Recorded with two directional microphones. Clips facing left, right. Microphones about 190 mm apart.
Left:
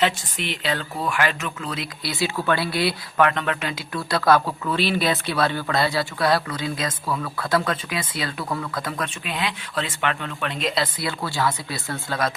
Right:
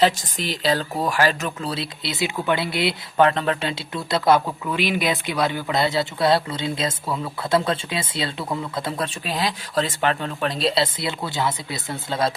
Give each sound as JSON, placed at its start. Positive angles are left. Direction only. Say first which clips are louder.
{"t": 0.0, "sound": "speech", "louder": "right 3 dB", "side_deg": -35}